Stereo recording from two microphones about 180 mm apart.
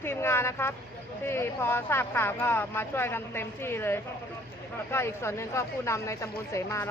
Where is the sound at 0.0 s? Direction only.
15° left (ahead or behind).